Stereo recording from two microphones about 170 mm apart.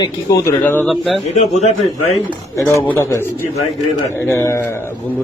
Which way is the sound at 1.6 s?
40° left (ahead or behind).